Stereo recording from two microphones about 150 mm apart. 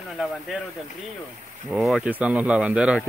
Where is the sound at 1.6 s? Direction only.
Centre (ahead or behind).